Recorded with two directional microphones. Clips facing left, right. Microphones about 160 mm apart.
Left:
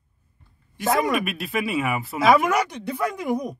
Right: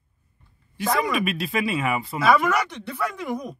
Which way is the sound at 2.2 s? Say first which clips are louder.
Left 2 dB; 15° left (ahead or behind).